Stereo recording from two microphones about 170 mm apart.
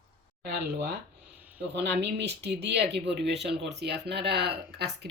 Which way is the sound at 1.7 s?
85° right.